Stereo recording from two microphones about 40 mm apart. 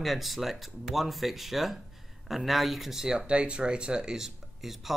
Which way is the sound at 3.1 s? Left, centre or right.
Right.